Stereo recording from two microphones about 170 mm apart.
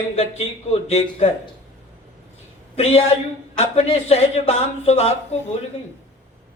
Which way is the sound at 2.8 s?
40° left (ahead or behind).